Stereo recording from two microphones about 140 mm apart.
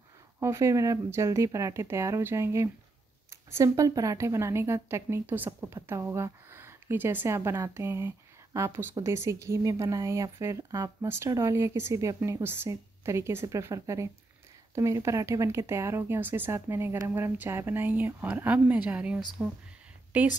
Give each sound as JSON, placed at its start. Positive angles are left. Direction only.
{"t": 0.4, "sound": "speech", "side_deg": -20}